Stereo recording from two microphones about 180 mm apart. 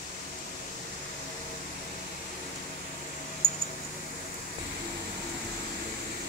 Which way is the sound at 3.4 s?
90° right.